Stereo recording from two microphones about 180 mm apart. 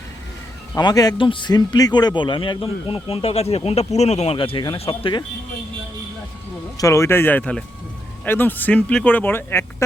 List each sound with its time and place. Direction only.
0.8 s a man's voice: 20° left (ahead or behind)
6.7 s speech: 15° left (ahead or behind)